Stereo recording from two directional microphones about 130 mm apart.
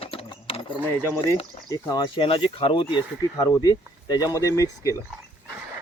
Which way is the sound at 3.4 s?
30° left (ahead or behind).